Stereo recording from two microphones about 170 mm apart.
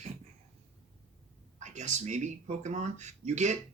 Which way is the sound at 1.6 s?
45° right (ahead or behind).